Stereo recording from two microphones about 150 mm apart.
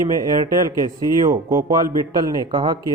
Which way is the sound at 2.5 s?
30° right (ahead or behind).